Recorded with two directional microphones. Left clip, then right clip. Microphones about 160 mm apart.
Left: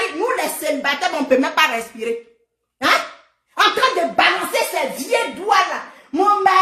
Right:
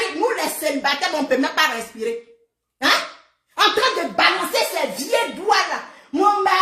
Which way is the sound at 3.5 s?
20° left (ahead or behind).